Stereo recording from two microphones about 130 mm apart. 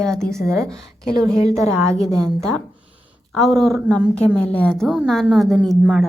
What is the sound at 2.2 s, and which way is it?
A woman's voice, 5° left (ahead or behind).